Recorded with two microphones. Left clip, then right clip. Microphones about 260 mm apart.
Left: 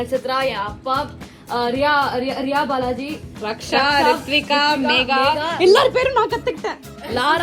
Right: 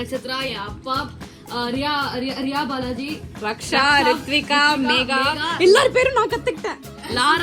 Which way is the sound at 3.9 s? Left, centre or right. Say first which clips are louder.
Left 1 dB; centre.